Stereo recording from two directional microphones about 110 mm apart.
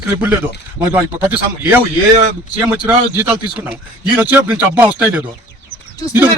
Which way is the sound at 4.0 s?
15° right (ahead or behind).